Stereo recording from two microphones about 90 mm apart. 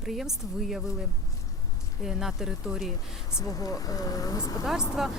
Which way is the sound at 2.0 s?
5° right (ahead or behind).